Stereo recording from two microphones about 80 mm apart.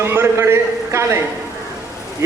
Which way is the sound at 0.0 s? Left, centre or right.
Right.